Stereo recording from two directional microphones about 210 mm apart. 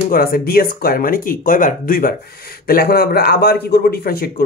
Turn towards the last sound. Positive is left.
turn(degrees=45)  # may be behind; listen again after turning